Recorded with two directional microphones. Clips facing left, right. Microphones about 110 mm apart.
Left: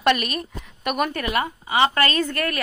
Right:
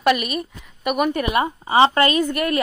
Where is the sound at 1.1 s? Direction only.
25° right (ahead or behind).